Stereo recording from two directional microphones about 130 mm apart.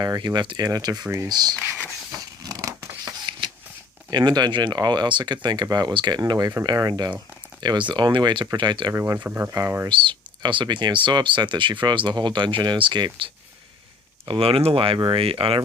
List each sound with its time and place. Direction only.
0.0 s speech: 30° right (ahead or behind)
2.1 s scissors: 30° right (ahead or behind)
4.1 s speech: 30° right (ahead or behind)
8.9 s speech: 25° right (ahead or behind)
9.9 s speech: 40° right (ahead or behind)
14.3 s speech: 45° right (ahead or behind)